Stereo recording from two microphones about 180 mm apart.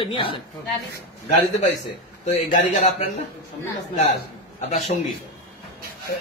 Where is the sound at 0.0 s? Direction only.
30° left (ahead or behind).